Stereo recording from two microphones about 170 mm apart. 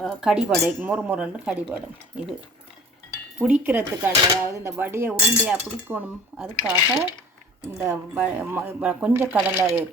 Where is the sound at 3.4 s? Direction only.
10° right (ahead or behind).